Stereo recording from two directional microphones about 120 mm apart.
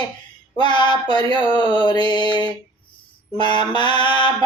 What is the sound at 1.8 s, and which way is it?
Music, 40° left (ahead or behind).